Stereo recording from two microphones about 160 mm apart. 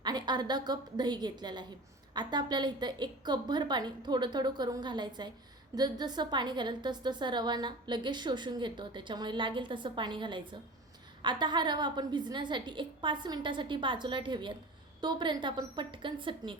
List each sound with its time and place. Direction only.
0.0 s a woman's voice: 25° right (ahead or behind)